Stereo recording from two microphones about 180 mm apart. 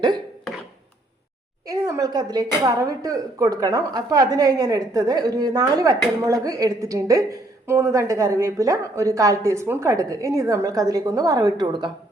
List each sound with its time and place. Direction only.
1.7 s a woman's voice: 20° right (ahead or behind)